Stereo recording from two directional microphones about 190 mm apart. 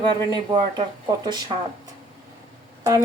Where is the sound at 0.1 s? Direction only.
25° right (ahead or behind).